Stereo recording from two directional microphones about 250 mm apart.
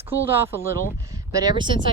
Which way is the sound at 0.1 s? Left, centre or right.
Centre.